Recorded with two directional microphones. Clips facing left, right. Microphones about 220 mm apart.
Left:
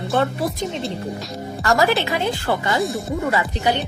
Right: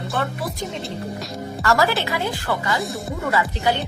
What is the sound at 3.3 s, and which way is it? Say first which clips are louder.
Speech: right 2 dB; 20° left (ahead or behind).